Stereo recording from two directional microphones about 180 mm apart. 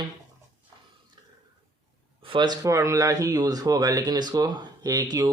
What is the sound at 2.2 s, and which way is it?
Speech, 25° right (ahead or behind).